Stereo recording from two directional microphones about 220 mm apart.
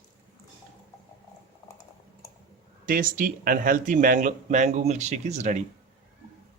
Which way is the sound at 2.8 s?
40° right (ahead or behind).